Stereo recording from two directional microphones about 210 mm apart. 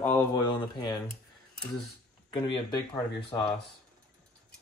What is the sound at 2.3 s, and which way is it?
Speech, 25° left (ahead or behind).